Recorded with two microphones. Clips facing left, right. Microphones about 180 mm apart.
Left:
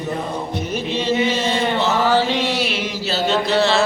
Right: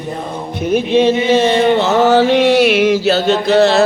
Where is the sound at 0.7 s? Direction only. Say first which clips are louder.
Right 11 dB; 55° right (ahead or behind).